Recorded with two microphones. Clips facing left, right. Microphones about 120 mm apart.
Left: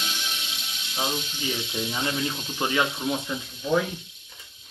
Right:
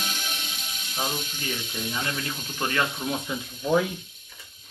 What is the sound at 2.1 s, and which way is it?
Snake, 45° right (ahead or behind).